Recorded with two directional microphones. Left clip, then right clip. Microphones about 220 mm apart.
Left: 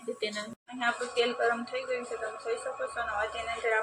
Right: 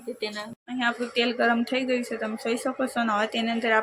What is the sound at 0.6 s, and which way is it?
Speech, 50° right (ahead or behind).